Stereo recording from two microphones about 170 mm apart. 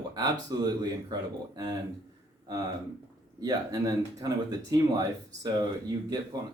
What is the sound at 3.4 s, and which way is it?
Speech, 20° right (ahead or behind).